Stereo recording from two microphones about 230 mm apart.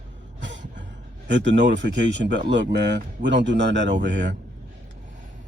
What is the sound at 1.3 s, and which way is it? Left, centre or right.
Speech, right.